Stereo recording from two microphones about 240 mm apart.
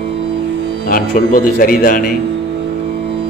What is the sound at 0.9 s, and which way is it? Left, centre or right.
A man's voice, left.